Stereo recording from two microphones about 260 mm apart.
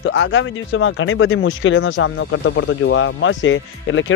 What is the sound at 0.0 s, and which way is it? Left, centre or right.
Speech, left.